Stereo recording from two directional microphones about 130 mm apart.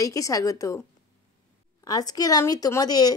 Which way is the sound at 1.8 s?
30° left (ahead or behind).